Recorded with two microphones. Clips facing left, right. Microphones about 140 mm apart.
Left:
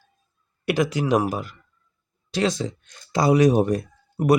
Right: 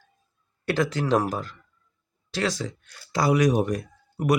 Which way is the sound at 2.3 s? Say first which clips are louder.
Left 4 dB; 20° left (ahead or behind).